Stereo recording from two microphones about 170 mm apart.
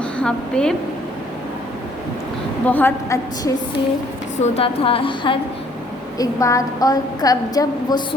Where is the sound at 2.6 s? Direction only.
10° left (ahead or behind).